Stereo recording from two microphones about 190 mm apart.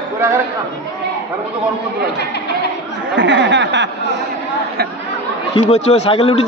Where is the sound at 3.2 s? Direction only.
70° right (ahead or behind).